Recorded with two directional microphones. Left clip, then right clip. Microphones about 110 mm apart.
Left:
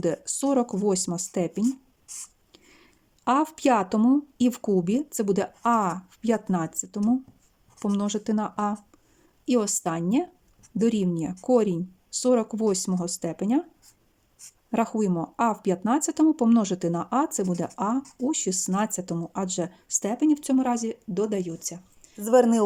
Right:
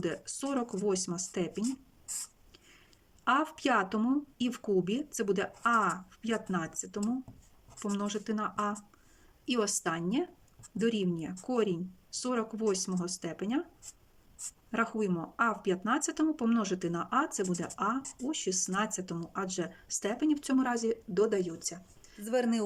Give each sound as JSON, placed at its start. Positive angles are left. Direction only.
{"t": 0.0, "sound": "speech", "side_deg": 40}
{"t": 3.2, "sound": "speech", "side_deg": 40}
{"t": 14.7, "sound": "speech", "side_deg": 40}